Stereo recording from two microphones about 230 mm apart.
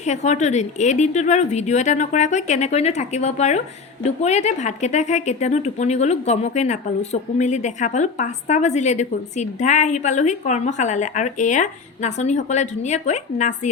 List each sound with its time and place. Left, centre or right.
0.0 s speech: left